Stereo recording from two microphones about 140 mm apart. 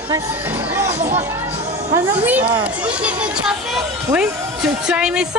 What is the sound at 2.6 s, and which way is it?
Speech, 10° right (ahead or behind).